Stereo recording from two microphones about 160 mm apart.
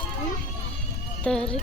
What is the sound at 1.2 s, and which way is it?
Speech, 5° left (ahead or behind).